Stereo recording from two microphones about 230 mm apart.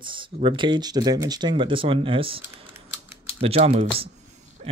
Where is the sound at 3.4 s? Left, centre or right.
Right.